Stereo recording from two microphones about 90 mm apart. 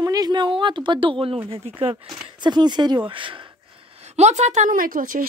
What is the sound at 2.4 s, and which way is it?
Speech, 55° right (ahead or behind).